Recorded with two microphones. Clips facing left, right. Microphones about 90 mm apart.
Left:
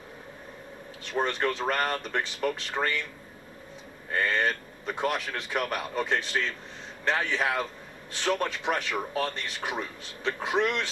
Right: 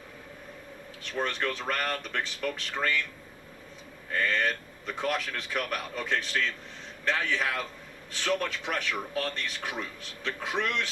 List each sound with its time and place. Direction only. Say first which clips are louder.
1.4 s a man's voice: left 4 dB; 25° left (ahead or behind)
4.2 s a man's voice: left 1 dB; 20° left (ahead or behind)